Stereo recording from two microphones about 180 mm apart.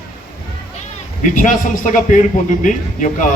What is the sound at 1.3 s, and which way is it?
A man's voice, 45° left (ahead or behind).